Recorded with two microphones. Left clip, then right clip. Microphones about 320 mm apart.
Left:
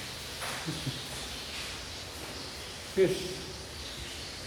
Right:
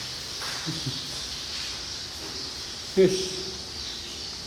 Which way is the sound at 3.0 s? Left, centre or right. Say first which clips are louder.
Right 6 dB; right.